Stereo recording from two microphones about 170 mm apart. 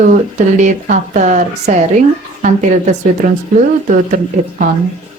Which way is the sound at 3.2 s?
45° right (ahead or behind).